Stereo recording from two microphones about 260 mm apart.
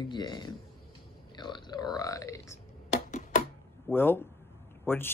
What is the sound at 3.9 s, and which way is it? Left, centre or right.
A man's voice, centre.